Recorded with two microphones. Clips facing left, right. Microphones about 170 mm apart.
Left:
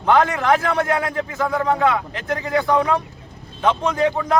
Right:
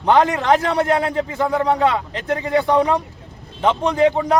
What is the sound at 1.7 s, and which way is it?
Speech, 20° right (ahead or behind).